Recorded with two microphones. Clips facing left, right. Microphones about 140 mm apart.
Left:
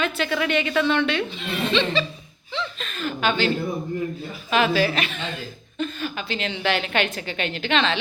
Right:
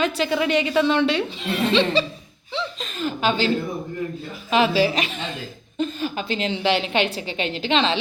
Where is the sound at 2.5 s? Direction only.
30° right (ahead or behind).